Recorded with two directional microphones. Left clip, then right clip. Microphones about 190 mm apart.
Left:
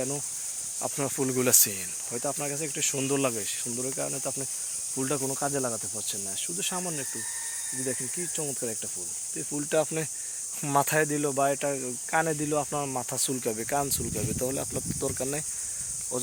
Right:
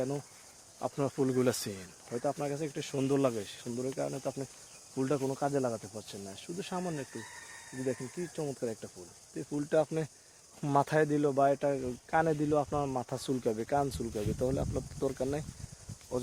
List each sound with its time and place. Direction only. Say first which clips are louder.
0.8 s speech: left 1 dB; 15° left (ahead or behind)
8.4 s speech: left 1 dB; 15° left (ahead or behind)